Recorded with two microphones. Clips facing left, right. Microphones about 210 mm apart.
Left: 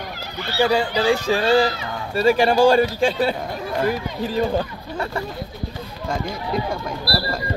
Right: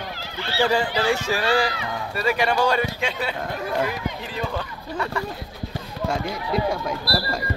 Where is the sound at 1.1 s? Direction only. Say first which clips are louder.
Left 7 dB; 30° left (ahead or behind).